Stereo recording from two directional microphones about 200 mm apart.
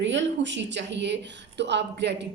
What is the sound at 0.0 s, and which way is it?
Speech, 65° right (ahead or behind).